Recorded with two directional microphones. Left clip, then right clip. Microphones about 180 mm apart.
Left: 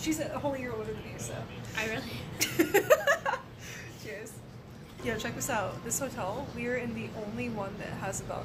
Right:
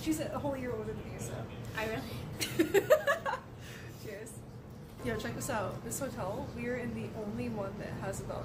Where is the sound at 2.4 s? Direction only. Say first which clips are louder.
Left 3 dB; 25° left (ahead or behind).